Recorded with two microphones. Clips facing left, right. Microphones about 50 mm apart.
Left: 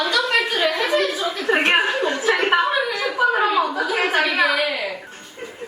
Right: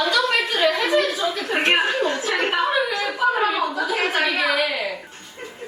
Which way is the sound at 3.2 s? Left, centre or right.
Centre.